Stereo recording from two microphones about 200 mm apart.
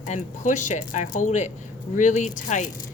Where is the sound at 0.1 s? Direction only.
40° left (ahead or behind).